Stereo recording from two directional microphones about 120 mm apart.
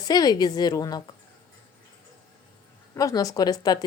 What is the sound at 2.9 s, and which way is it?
Speech, 30° left (ahead or behind).